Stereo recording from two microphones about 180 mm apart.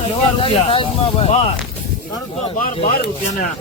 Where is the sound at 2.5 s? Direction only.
50° left (ahead or behind).